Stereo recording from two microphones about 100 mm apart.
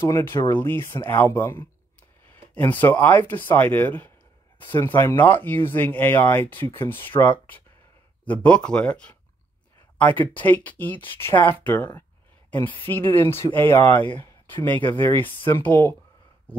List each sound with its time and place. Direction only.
0.1 s speech: 25° left (ahead or behind)